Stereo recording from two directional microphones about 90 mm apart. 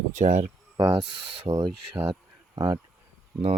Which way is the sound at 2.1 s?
50° right (ahead or behind).